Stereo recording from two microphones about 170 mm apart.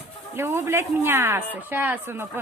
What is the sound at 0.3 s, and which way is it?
Speech, 15° right (ahead or behind).